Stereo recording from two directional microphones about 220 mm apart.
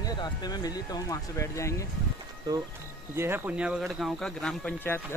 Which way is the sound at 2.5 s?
15° right (ahead or behind).